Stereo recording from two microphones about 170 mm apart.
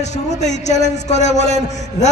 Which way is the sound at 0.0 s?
45° left (ahead or behind).